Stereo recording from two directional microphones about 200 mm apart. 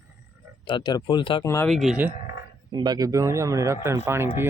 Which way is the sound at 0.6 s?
25° left (ahead or behind).